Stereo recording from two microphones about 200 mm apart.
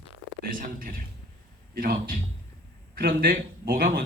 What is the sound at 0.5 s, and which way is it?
A man's voice, 45° right (ahead or behind).